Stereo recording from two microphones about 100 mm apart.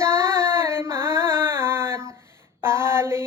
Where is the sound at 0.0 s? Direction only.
25° right (ahead or behind).